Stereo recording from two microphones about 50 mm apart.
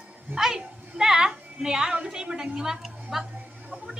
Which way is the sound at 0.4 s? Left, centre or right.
Centre.